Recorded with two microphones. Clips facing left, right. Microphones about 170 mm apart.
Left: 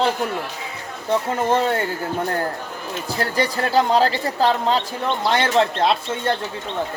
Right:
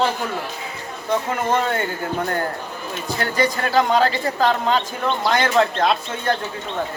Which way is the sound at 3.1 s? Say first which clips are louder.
Right 1 dB; 30° left (ahead or behind).